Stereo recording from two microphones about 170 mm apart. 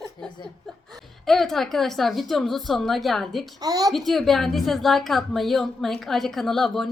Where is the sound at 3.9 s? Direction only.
Centre (ahead or behind).